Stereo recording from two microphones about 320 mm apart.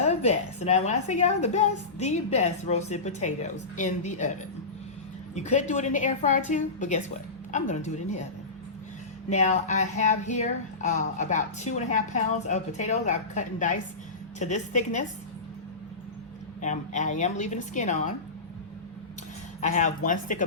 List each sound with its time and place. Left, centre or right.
0.0 s a woman's voice: left
5.3 s speech: left
9.3 s speech: left
16.6 s speech: left
19.6 s speech: left